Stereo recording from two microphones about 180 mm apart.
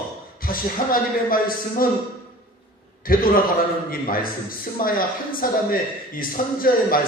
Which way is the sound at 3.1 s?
50° left (ahead or behind).